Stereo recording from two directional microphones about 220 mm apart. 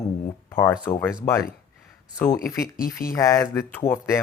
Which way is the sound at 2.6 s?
40° left (ahead or behind).